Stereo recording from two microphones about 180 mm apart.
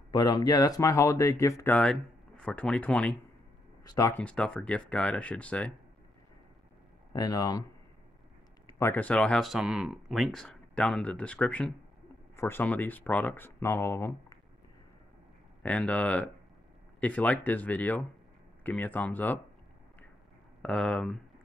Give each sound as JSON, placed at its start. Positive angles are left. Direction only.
{"t": 0.1, "sound": "speech", "side_deg": 20}
{"t": 7.1, "sound": "speech", "side_deg": 20}
{"t": 8.7, "sound": "speech", "side_deg": 10}
{"t": 15.6, "sound": "speech", "side_deg": 5}
{"t": 20.6, "sound": "speech", "side_deg": 5}